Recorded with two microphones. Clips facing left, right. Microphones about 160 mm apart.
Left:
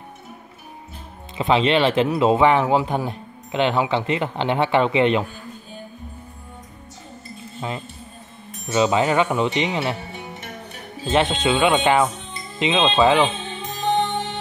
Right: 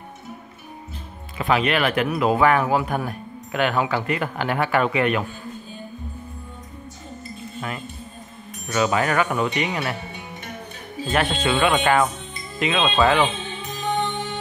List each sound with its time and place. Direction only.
1.4 s speech: 25° left (ahead or behind)
7.6 s speech: 25° left (ahead or behind)
11.1 s speech: 20° left (ahead or behind)